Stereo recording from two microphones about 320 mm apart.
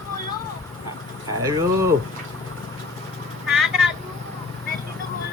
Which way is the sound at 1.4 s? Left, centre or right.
Centre.